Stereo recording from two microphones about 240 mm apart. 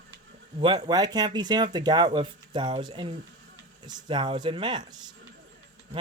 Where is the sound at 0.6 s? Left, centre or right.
Centre.